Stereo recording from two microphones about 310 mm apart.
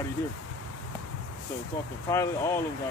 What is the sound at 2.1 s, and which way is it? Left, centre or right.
Speech, centre.